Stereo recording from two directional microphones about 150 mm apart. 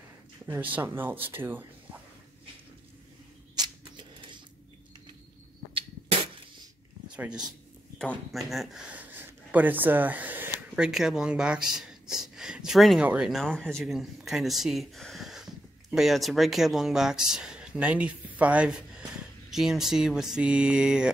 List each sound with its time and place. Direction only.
0.5 s speech: 10° right (ahead or behind)
3.5 s a sound: 30° right (ahead or behind)
7.2 s speech: 5° right (ahead or behind)